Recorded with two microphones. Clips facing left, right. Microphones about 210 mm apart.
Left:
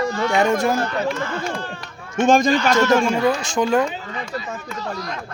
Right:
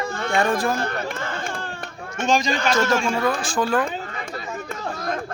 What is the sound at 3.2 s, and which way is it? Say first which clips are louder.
Speech: left 3 dB; 20° left (ahead or behind).